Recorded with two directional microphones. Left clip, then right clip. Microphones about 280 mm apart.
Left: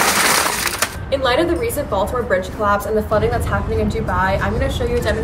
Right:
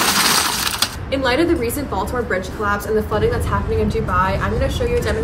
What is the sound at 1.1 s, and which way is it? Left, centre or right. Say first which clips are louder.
Speech: left 1 dB; centre.